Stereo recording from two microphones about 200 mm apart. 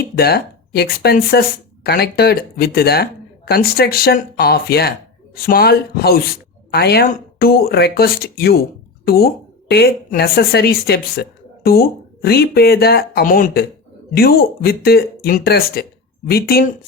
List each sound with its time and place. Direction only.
0.0 s speech: 50° left (ahead or behind)